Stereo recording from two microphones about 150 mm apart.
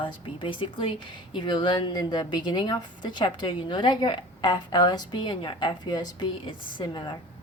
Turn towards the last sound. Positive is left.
turn(degrees=30)  # may be behind; listen again after turning